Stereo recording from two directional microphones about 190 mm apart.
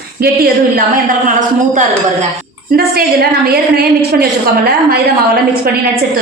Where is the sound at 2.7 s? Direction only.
55° right (ahead or behind).